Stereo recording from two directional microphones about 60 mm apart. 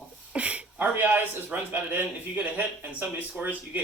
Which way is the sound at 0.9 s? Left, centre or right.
Right.